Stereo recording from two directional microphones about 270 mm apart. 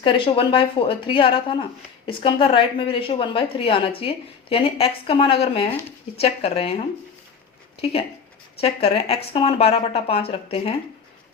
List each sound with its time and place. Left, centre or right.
0.0 s a woman's voice: centre
8.6 s a woman's voice: left